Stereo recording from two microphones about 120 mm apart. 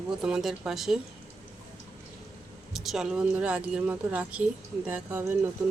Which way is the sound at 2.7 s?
Centre (ahead or behind).